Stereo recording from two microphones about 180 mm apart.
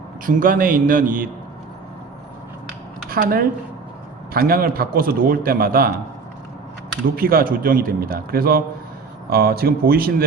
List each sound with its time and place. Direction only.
0.3 s a man's voice: 50° right (ahead or behind)
3.1 s a man's voice: 55° right (ahead or behind)
7.2 s a man's voice: 55° right (ahead or behind)